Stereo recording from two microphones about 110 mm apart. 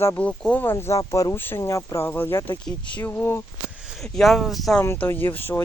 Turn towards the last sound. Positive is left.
turn(degrees=20)  # may be behind; listen again after turning